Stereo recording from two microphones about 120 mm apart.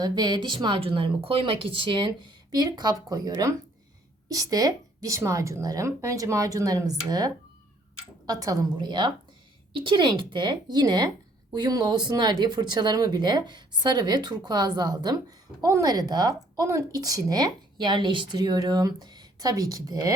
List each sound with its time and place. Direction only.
0.0 s speech: 40° right (ahead or behind)